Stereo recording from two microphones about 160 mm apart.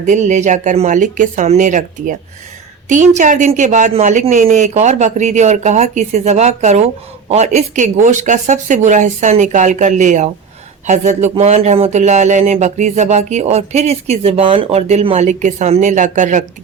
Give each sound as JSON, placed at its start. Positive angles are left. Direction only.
{"t": 0.0, "sound": "speech", "side_deg": -50}